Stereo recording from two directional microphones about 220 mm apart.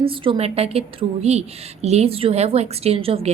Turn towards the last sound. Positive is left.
turn(degrees=-25)  # may be behind; listen again after turning